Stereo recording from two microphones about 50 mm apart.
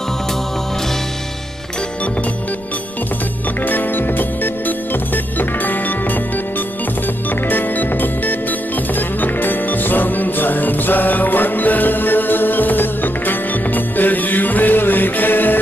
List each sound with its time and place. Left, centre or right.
3.6 s music: left